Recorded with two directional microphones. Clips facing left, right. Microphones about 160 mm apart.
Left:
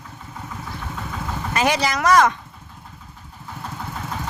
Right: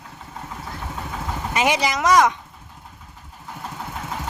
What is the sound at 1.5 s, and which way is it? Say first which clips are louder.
Speech: even; 20° right (ahead or behind).